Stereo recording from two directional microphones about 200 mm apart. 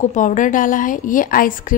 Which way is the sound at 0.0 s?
40° left (ahead or behind).